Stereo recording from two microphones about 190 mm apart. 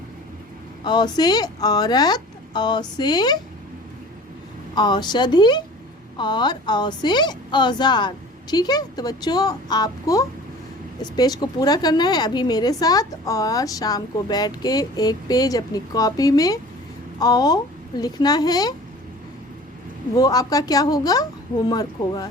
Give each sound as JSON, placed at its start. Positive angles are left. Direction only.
{"t": 0.9, "sound": "a woman's voice", "side_deg": 20}
{"t": 4.7, "sound": "a woman's voice", "side_deg": 25}
{"t": 20.1, "sound": "a woman's voice", "side_deg": 20}